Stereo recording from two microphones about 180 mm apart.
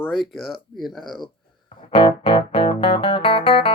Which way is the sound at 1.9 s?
30° left (ahead or behind).